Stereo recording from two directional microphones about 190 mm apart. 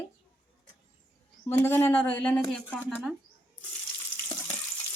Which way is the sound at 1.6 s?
15° left (ahead or behind).